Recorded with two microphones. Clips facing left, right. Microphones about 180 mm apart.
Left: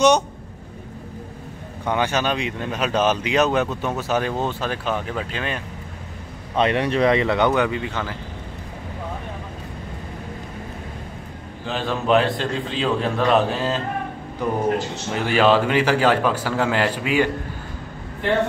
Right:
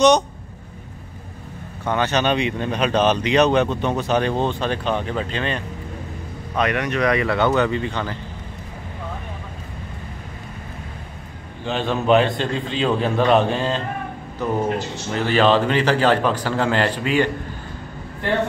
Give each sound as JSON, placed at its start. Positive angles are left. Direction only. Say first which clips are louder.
{"t": 1.9, "sound": "speech", "louder": "right 2 dB", "side_deg": 10}
{"t": 6.5, "sound": "speech", "louder": "left 2 dB", "side_deg": 30}
{"t": 11.6, "sound": "a man's voice", "louder": "right 3 dB", "side_deg": 0}